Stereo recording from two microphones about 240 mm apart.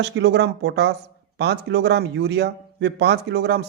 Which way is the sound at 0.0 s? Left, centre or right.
Right.